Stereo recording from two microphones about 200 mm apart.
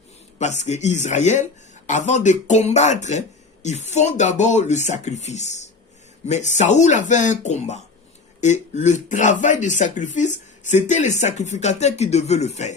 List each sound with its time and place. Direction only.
0.3 s speech: 35° left (ahead or behind)